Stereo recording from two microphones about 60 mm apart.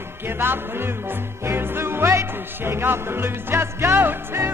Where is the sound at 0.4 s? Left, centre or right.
Right.